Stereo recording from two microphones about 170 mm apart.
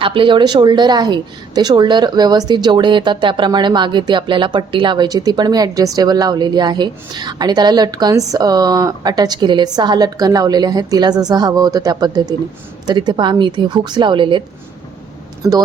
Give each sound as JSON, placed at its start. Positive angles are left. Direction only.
{"t": 0.0, "sound": "a woman's voice", "side_deg": -30}